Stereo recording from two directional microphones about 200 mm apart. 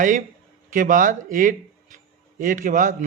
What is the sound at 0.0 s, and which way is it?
Speech, 40° right (ahead or behind).